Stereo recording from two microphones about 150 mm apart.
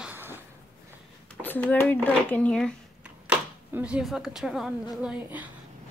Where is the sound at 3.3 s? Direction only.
10° right (ahead or behind).